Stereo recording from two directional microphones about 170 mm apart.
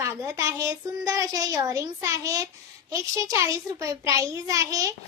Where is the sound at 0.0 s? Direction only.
20° right (ahead or behind).